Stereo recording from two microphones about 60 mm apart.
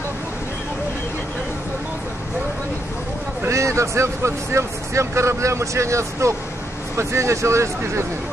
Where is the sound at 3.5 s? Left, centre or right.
Right.